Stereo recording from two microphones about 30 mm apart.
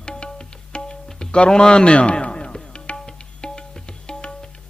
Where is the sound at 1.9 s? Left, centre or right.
Left.